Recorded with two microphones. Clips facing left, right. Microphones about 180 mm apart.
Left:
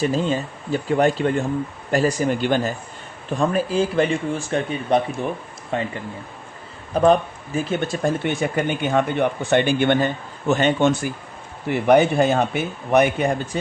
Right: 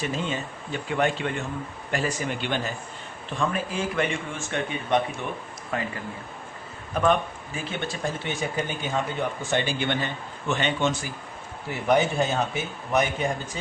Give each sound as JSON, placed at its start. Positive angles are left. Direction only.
{"t": 0.0, "sound": "speech", "side_deg": 35}
{"t": 6.9, "sound": "speech", "side_deg": 35}
{"t": 11.7, "sound": "speech", "side_deg": 65}